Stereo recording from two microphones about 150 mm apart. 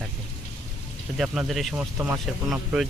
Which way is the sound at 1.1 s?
5° right (ahead or behind).